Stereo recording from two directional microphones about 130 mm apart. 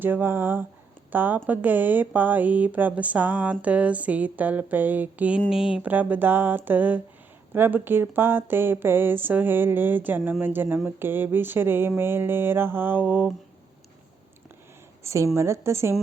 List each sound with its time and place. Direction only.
0.0 s speech: 15° right (ahead or behind)
15.0 s a woman's voice: 25° right (ahead or behind)